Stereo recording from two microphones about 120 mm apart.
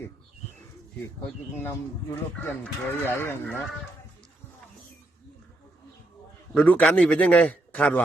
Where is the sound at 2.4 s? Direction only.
15° left (ahead or behind).